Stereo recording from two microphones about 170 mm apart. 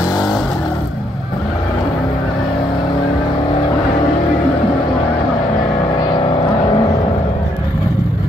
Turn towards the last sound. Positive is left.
turn(degrees=30)  # may be behind; listen again after turning